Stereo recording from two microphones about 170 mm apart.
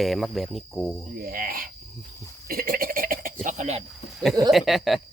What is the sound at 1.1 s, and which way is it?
Speech, 60° right (ahead or behind).